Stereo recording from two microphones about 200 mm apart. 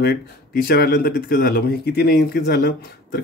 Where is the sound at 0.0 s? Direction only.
50° left (ahead or behind).